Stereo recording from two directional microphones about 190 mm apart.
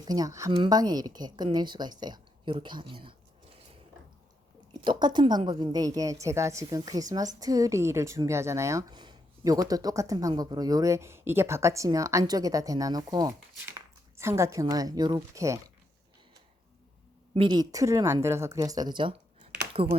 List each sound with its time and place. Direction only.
0.0 s a woman's voice: 20° right (ahead or behind)
4.8 s a woman's voice: 25° right (ahead or behind)
17.3 s a woman's voice: 25° right (ahead or behind)